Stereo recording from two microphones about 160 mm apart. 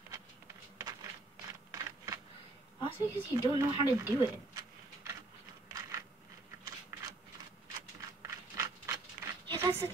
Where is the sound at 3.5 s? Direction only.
30° left (ahead or behind).